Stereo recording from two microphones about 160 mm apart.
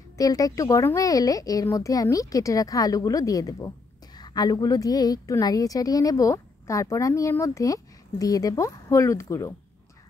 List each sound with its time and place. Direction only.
0.2 s a woman's voice: 20° left (ahead or behind)